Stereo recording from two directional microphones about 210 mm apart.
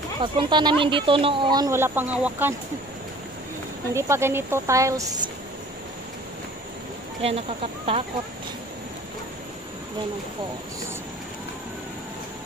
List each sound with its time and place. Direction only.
0.2 s speech: 20° right (ahead or behind)
3.9 s speech: 10° right (ahead or behind)
7.2 s speech: 30° right (ahead or behind)